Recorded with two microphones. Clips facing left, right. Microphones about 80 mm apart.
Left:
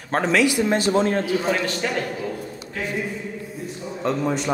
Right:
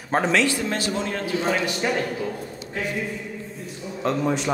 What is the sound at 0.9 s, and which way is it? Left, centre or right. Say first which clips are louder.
Speech: left 7 dB; left.